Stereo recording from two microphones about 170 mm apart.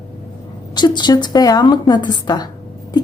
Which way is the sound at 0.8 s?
25° left (ahead or behind).